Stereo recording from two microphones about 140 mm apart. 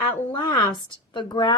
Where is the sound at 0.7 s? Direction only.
35° left (ahead or behind).